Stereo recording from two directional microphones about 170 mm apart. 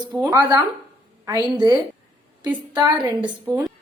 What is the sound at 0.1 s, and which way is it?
A woman's voice, 20° right (ahead or behind).